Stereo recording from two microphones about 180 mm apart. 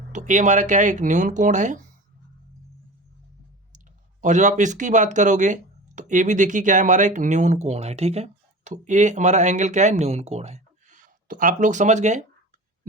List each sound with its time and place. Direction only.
0.1 s speech: 45° right (ahead or behind)
4.2 s speech: 40° right (ahead or behind)